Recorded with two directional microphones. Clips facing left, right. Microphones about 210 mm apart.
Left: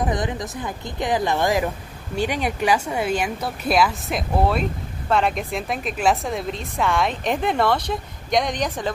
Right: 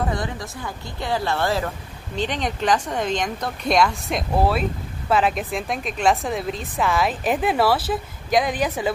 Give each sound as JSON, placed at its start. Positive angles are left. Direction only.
{"t": 0.0, "sound": "a woman's voice", "side_deg": 20}